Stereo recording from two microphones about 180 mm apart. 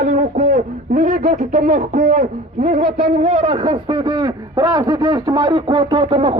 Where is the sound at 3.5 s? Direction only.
25° right (ahead or behind).